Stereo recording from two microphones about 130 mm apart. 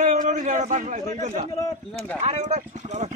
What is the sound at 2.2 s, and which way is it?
Speech, 55° right (ahead or behind).